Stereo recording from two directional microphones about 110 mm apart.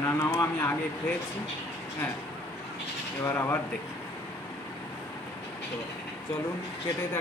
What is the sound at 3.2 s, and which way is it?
Speech, 20° left (ahead or behind).